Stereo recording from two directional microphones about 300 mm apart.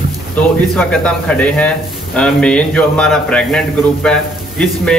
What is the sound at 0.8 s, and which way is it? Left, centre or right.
A man's voice, centre.